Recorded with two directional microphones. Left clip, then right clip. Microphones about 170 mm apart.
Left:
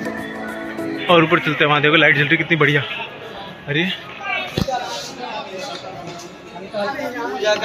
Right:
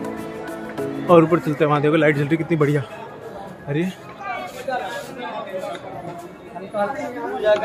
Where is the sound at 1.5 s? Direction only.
20° right (ahead or behind).